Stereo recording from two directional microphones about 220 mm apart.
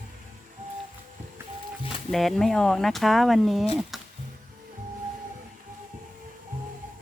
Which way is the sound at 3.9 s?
Centre (ahead or behind).